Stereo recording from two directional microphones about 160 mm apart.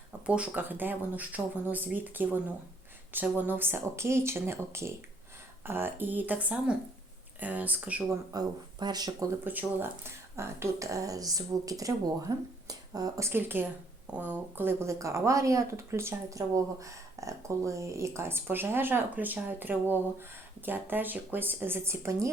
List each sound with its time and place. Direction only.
0.3 s speech: 10° right (ahead or behind)
8.3 s speech: 25° right (ahead or behind)
9.4 s speech: 10° right (ahead or behind)